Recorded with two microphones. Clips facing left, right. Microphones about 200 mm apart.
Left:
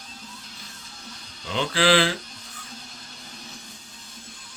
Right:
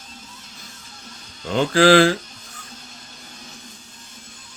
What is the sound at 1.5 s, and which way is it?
Speech, 45° right (ahead or behind).